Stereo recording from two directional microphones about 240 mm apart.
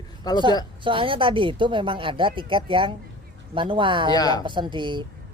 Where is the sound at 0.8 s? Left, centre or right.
Right.